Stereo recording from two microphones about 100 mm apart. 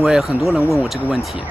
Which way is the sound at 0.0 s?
5° right (ahead or behind).